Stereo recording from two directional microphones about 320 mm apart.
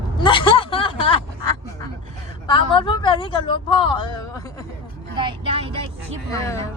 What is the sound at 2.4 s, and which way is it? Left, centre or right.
Speech, centre.